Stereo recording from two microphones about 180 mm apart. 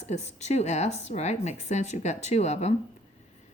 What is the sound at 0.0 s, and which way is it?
Speech, 40° left (ahead or behind).